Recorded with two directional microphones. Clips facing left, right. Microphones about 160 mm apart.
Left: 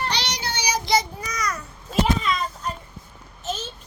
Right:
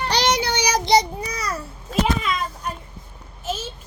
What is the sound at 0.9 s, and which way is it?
Babbling, 25° right (ahead or behind).